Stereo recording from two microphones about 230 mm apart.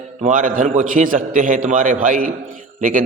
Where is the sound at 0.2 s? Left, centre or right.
Right.